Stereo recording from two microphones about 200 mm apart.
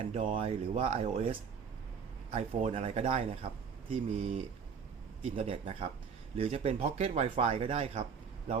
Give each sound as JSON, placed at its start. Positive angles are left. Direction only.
{"t": 0.0, "sound": "speech", "side_deg": -30}